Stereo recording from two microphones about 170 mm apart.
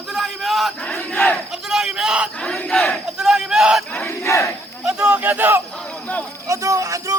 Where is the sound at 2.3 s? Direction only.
5° left (ahead or behind).